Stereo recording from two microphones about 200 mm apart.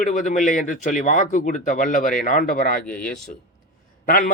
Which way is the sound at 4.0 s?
45° left (ahead or behind).